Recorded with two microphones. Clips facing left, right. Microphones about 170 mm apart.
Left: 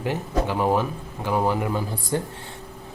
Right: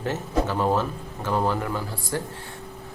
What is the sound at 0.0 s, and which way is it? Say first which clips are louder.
Speech: even; 15° left (ahead or behind).